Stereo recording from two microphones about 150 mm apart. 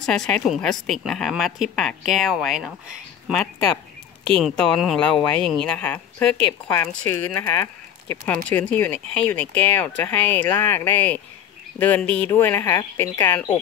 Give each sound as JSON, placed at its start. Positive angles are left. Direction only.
{"t": 0.0, "sound": "a woman's voice", "side_deg": 5}